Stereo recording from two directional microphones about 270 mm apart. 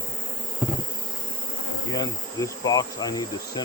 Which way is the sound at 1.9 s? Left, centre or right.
Centre.